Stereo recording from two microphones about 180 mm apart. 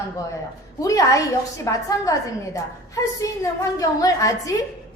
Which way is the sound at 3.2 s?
20° left (ahead or behind).